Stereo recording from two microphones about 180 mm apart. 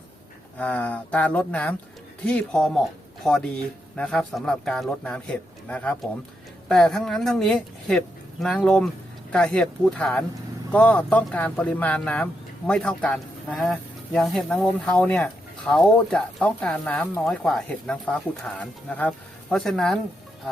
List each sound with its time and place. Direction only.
0.6 s speech: 10° left (ahead or behind)